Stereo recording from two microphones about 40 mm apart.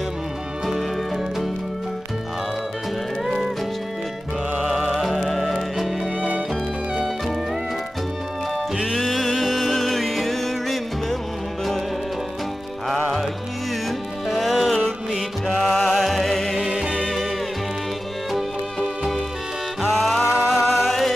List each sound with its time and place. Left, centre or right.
0.7 s music: centre
3.3 s music: centre
4.6 s music: centre
9.0 s music: centre
12.8 s music: centre
16.5 s music: centre
17.0 s music: centre
18.3 s music: centre